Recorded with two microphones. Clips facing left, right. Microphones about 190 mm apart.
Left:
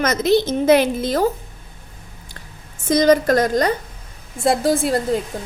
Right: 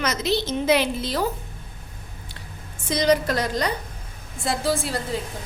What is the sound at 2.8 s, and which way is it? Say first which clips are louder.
A woman's voice: left 6 dB; 45° left (ahead or behind).